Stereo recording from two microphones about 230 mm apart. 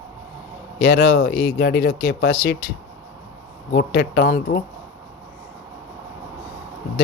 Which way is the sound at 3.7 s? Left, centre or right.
Left.